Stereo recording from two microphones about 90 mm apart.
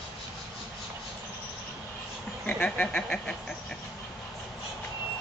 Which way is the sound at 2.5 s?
15° left (ahead or behind).